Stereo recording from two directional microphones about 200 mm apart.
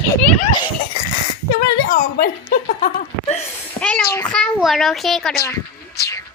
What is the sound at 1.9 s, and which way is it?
Speech, 45° left (ahead or behind).